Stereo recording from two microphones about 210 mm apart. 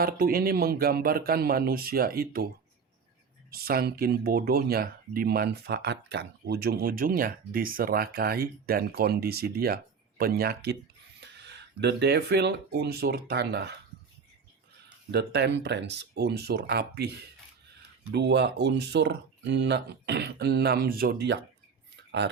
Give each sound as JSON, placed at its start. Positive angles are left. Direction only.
{"t": 0.0, "sound": "speech", "side_deg": -45}
{"t": 3.5, "sound": "speech", "side_deg": -45}
{"t": 15.1, "sound": "speech", "side_deg": -50}
{"t": 18.1, "sound": "speech", "side_deg": -55}